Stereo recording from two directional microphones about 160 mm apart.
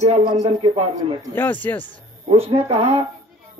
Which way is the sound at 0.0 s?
40° right (ahead or behind).